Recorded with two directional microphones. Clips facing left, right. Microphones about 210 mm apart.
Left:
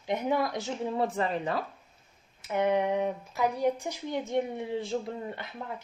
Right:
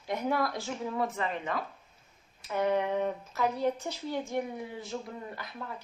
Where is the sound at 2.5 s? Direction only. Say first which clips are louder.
Left 2 dB; 20° left (ahead or behind).